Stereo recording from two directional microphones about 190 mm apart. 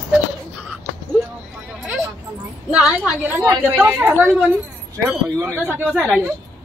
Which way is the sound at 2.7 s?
5° right (ahead or behind).